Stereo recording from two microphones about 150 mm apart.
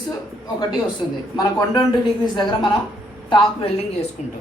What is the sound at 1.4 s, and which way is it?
Speech, 25° left (ahead or behind).